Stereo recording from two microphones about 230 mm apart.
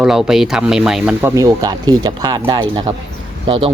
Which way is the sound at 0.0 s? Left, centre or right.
Centre.